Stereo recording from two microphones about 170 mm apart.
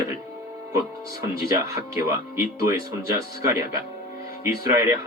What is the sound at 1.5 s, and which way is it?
Speech, 15° right (ahead or behind).